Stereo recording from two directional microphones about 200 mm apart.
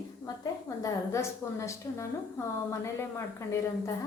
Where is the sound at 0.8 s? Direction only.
15° left (ahead or behind).